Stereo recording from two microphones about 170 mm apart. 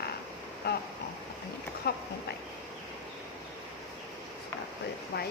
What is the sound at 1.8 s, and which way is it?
Speech, 70° left (ahead or behind).